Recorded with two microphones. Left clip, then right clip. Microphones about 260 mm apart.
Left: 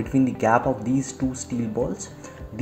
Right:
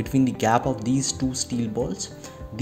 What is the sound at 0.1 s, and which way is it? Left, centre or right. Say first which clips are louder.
Speech: left 1 dB; right.